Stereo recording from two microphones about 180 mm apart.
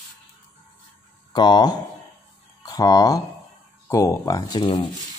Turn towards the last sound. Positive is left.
turn(degrees=20)  # may be behind; listen again after turning